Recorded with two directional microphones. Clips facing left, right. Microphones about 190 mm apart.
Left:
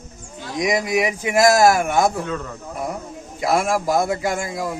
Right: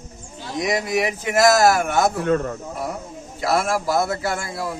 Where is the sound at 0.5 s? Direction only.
10° left (ahead or behind).